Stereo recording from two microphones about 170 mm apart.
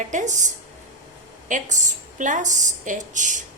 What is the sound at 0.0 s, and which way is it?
A woman's voice, 45° right (ahead or behind).